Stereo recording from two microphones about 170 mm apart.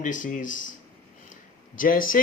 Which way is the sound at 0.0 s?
50° left (ahead or behind).